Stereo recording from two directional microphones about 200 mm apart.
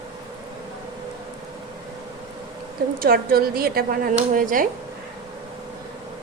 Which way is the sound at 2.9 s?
50° right (ahead or behind).